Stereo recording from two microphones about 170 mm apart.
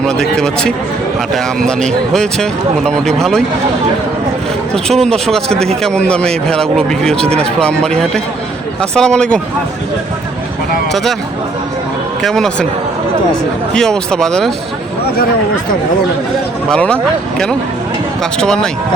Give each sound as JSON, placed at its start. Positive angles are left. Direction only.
{"t": 0.1, "sound": "speech", "side_deg": 5}
{"t": 4.7, "sound": "speech", "side_deg": 5}
{"t": 12.2, "sound": "speech", "side_deg": 5}
{"t": 13.7, "sound": "speech", "side_deg": 5}
{"t": 15.0, "sound": "speech", "side_deg": 65}
{"t": 16.6, "sound": "speech", "side_deg": 5}